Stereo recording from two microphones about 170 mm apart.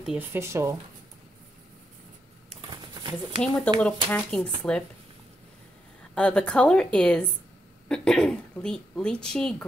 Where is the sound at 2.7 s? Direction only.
25° right (ahead or behind).